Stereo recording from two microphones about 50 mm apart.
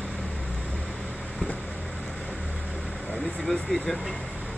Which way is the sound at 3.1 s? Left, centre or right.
Centre.